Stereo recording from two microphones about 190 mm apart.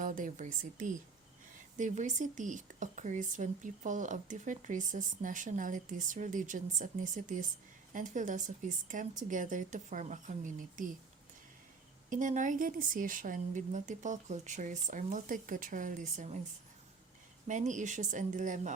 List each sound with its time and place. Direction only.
0.0 s a woman's voice: 45° right (ahead or behind)
12.1 s a woman's voice: 40° right (ahead or behind)
17.5 s speech: 40° right (ahead or behind)